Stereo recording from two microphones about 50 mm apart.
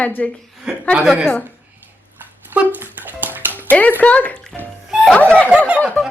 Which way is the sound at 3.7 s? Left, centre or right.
Left.